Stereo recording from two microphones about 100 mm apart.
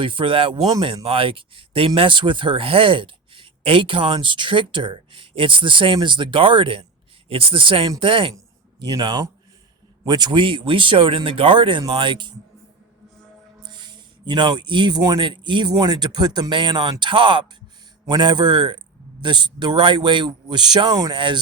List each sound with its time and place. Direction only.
0.0 s speech: 60° right (ahead or behind)
2.0 s speech: 55° right (ahead or behind)
14.3 s speech: 50° right (ahead or behind)